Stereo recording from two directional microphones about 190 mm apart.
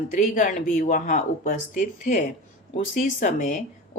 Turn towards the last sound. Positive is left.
turn(degrees=45)  # may be behind; listen again after turning